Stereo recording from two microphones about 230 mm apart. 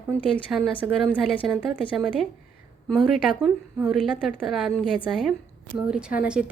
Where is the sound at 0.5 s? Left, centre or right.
Centre.